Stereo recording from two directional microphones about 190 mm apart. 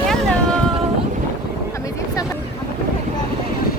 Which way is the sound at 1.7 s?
15° left (ahead or behind).